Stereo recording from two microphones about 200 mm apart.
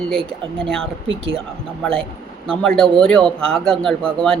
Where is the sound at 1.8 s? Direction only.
5° left (ahead or behind).